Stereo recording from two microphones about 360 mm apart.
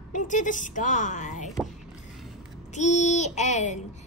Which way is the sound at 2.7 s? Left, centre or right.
Centre.